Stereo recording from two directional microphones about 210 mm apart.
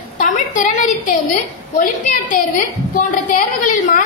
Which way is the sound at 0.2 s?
35° left (ahead or behind).